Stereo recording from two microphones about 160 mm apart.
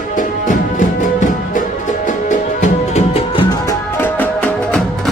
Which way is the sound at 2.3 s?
45° left (ahead or behind).